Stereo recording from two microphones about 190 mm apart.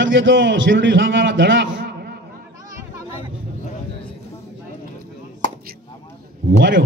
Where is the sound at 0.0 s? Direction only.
75° right (ahead or behind); by 2.1 s 60° right (ahead or behind).